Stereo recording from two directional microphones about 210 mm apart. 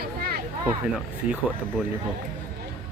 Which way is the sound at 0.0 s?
45° right (ahead or behind).